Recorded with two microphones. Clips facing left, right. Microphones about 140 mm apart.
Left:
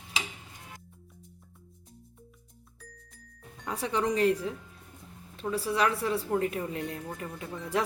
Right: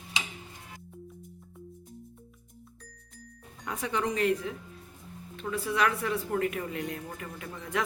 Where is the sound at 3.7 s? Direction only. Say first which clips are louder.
Left 2 dB; 30° left (ahead or behind).